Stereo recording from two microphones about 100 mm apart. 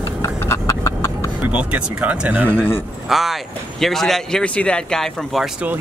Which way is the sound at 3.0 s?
Centre (ahead or behind).